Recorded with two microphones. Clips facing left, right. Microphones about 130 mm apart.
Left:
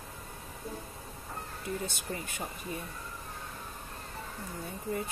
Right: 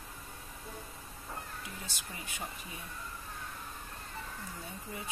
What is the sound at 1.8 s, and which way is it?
Speech, 50° left (ahead or behind).